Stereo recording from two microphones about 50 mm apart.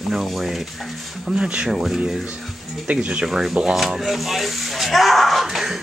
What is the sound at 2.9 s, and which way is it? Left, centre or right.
Speech, right.